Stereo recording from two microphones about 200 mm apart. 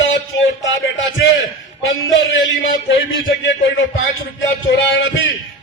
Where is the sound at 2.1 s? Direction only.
75° left (ahead or behind).